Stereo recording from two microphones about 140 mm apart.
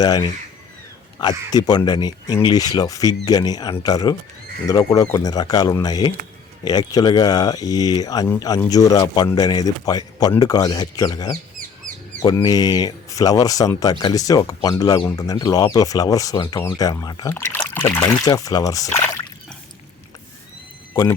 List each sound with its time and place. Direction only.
0.0 s a man's voice: 30° left (ahead or behind)
1.5 s a man's voice: 30° left (ahead or behind)
20.9 s speech: 25° left (ahead or behind)